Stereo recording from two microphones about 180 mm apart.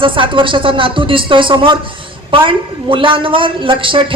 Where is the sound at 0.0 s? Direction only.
30° right (ahead or behind).